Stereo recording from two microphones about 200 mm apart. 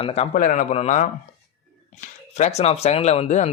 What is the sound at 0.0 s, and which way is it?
Speech, 30° left (ahead or behind).